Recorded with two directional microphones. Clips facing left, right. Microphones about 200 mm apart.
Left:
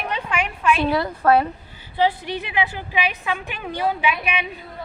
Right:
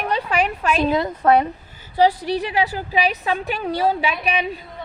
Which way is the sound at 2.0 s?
40° right (ahead or behind).